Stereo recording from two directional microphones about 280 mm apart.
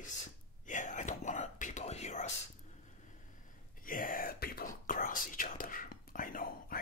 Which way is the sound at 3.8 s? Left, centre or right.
Left.